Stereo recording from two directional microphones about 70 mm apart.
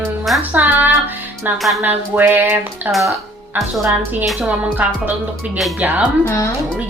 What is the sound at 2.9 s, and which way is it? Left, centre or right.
Speech, centre.